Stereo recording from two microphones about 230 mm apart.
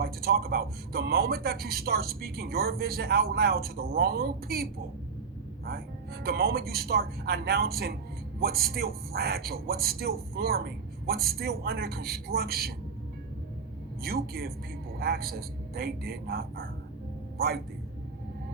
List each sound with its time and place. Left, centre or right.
0.0 s a man's voice: right
6.2 s a man's voice: right
14.0 s a man's voice: right